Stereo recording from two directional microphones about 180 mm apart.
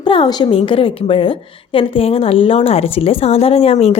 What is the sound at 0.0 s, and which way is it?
A woman's voice, 25° left (ahead or behind).